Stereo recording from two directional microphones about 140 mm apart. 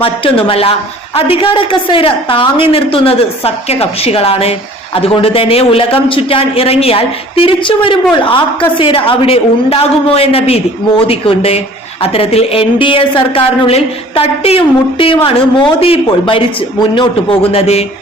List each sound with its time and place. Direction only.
0.0 s a woman's voice: 40° left (ahead or behind)
17.5 s a man's voice: 45° left (ahead or behind)